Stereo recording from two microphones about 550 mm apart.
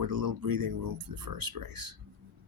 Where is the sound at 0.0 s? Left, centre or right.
Right.